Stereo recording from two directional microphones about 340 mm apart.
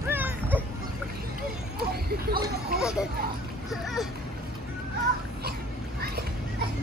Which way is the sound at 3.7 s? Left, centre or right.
Centre.